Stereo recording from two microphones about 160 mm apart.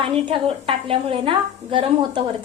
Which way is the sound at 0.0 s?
35° right (ahead or behind).